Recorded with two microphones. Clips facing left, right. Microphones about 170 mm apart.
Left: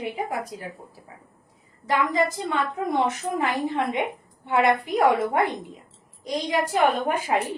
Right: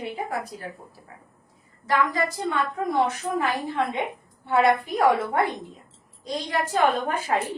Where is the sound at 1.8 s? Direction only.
20° left (ahead or behind).